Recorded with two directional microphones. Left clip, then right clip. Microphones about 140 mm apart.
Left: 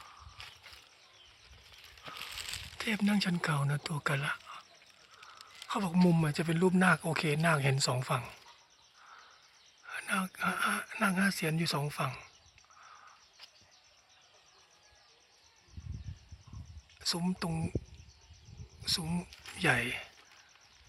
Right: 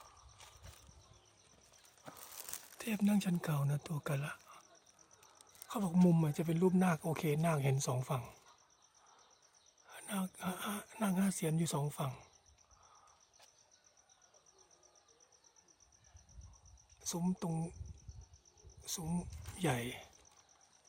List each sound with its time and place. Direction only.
2.7 s speech: 10° right (ahead or behind)
5.6 s speech: 10° right (ahead or behind)
9.8 s speech: 20° right (ahead or behind)
17.0 s a sound: 15° right (ahead or behind)
17.4 s speech: 15° right (ahead or behind)
18.8 s speech: 20° right (ahead or behind)